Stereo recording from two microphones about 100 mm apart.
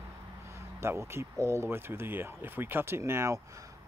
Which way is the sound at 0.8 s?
25° right (ahead or behind).